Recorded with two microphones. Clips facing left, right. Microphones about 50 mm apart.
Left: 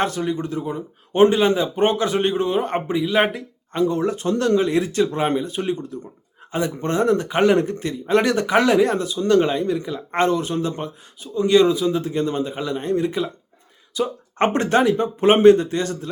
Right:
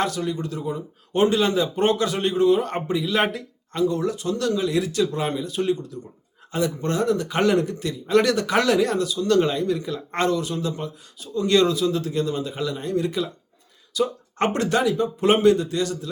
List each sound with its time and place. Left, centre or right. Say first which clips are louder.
0.0 s a man's voice: left 2 dB; left
3.8 s a man's voice: left 2 dB; left; by 10.2 s centre
10.2 s speech: left 1 dB; left
11.4 s a man's voice: left 3 dB; centre; by 16.0 s left